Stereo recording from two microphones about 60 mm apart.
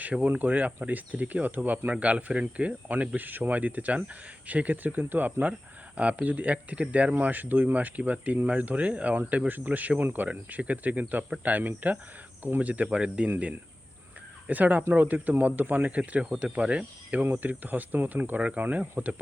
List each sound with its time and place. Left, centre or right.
0.0 s speech: right
14.4 s speech: right